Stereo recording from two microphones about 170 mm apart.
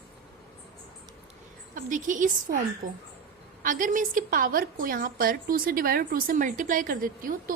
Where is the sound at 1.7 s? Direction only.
50° right (ahead or behind).